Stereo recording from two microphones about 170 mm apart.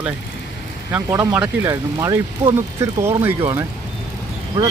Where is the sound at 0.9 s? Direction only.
10° right (ahead or behind).